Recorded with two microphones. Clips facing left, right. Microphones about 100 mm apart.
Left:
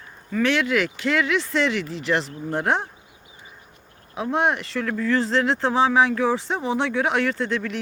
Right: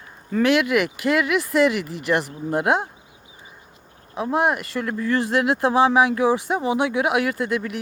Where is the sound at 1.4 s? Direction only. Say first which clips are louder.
Right 4 dB; 10° right (ahead or behind).